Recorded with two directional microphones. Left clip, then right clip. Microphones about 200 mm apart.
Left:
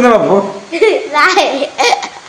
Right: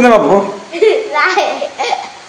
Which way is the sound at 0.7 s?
30° left (ahead or behind).